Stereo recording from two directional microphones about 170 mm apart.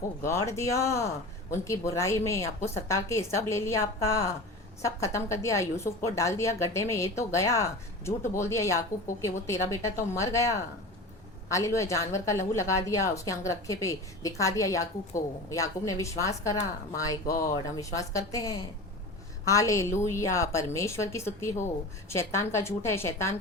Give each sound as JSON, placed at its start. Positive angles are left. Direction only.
{"t": 0.2, "sound": "a woman's voice", "side_deg": 15}